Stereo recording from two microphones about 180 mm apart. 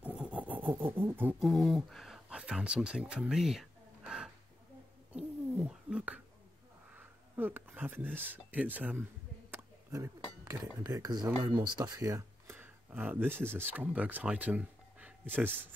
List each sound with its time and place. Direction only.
0.0 s a sound: 5° right (ahead or behind)
0.9 s beatboxing: 10° right (ahead or behind)
1.4 s speech: centre (ahead or behind)
5.1 s a sound: 5° right (ahead or behind)
6.9 s speech: 10° right (ahead or behind)
9.5 s dishes: 15° right (ahead or behind)
10.8 s speech: 20° right (ahead or behind)